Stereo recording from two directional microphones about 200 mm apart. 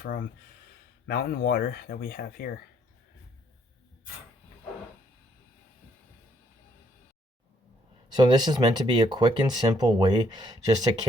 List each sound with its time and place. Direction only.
0.0 s speech: 45° left (ahead or behind)
8.1 s speech: 20° right (ahead or behind)